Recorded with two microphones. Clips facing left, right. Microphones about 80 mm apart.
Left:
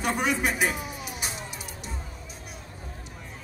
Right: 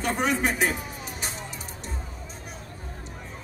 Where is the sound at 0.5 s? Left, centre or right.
Centre.